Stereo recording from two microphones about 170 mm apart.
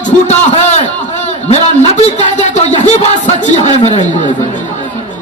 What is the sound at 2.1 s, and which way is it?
Speech, 45° left (ahead or behind).